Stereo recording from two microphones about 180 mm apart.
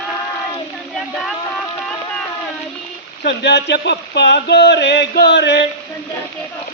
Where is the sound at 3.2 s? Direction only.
70° left (ahead or behind).